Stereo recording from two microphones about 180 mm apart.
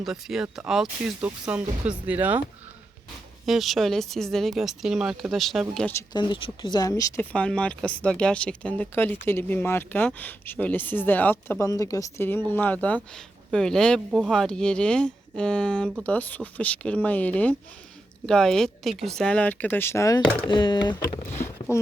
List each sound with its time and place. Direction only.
0.0 s speech: centre (ahead or behind)
3.4 s speech: centre (ahead or behind)
5.9 s speech: 20° left (ahead or behind)
7.3 s speech: 5° left (ahead or behind)